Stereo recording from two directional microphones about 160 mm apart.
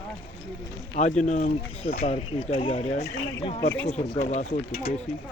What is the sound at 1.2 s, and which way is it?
Speech, 50° left (ahead or behind).